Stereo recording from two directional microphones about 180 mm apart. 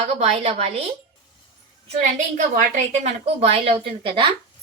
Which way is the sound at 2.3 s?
40° right (ahead or behind).